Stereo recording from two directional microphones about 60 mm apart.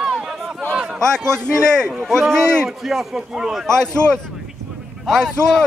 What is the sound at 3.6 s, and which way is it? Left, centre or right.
A man's voice, centre.